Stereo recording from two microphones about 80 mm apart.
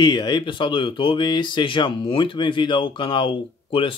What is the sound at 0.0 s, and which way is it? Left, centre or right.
Speech, left.